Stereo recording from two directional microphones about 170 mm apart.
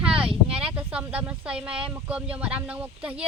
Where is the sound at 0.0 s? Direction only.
5° right (ahead or behind).